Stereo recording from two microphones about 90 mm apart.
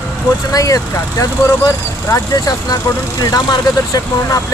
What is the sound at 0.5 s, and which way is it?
Speech, 40° left (ahead or behind).